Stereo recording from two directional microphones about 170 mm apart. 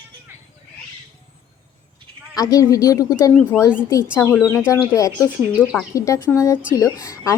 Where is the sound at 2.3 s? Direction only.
20° left (ahead or behind).